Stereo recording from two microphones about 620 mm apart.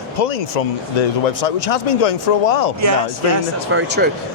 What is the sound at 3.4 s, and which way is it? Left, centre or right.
Speech, centre.